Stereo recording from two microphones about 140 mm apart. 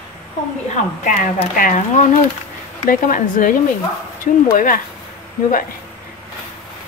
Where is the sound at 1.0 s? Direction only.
65° left (ahead or behind).